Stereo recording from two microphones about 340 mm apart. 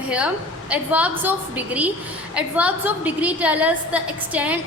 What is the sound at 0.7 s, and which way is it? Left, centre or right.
A woman's voice, centre.